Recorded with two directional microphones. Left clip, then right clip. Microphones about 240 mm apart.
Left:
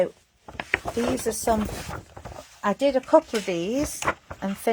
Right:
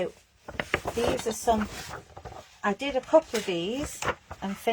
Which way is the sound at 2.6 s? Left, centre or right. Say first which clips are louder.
Left 6 dB; left.